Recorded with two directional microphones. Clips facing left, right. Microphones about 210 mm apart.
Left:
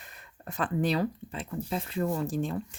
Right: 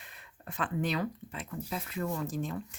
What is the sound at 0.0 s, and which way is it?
Speech, 40° left (ahead or behind).